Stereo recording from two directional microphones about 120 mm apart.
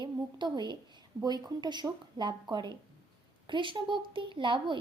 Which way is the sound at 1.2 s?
35° right (ahead or behind).